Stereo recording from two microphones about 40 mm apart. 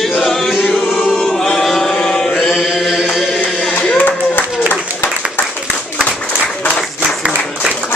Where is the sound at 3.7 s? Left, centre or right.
Left.